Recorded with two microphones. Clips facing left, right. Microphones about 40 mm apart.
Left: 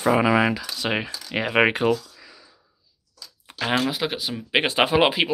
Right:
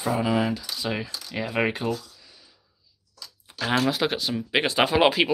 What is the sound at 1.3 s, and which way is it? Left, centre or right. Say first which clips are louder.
Speech: left 6 dB; left.